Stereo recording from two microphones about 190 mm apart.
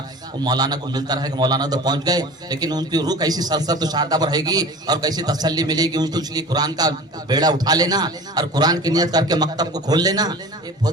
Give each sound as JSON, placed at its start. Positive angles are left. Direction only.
{"t": 0.4, "sound": "a man's voice", "side_deg": -20}